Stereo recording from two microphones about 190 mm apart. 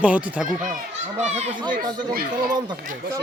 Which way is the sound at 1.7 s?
50° right (ahead or behind).